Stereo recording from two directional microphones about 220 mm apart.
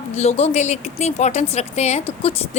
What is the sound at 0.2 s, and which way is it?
A woman's voice, 30° left (ahead or behind).